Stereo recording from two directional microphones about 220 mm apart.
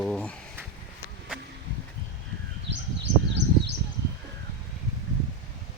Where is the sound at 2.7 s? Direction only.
50° right (ahead or behind).